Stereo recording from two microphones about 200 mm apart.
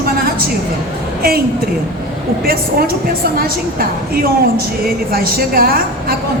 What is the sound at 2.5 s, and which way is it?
A woman's voice, 45° right (ahead or behind).